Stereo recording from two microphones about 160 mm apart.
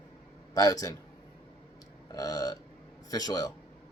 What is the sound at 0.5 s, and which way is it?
Speech, 20° left (ahead or behind).